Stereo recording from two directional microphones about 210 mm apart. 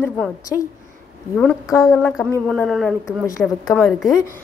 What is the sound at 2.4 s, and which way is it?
A woman's voice, 5° left (ahead or behind).